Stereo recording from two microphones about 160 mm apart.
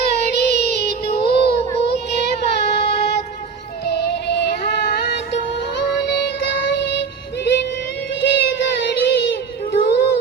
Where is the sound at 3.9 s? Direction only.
90° left.